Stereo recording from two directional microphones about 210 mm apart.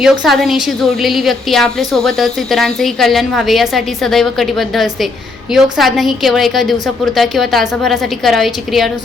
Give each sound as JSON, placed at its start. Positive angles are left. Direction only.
{"t": 0.0, "sound": "a woman's voice", "side_deg": 0}